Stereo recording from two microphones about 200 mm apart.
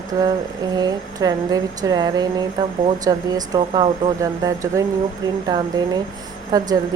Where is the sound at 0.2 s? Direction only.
20° right (ahead or behind).